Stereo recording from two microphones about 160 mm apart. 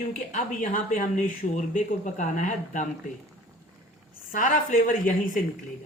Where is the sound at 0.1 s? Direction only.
55° left (ahead or behind).